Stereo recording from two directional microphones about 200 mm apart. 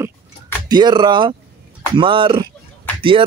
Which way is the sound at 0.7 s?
20° right (ahead or behind).